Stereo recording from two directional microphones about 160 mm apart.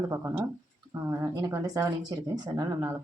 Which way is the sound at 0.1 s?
15° right (ahead or behind).